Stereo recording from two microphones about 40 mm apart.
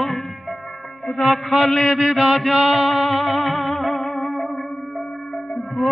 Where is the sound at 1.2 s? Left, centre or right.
Centre.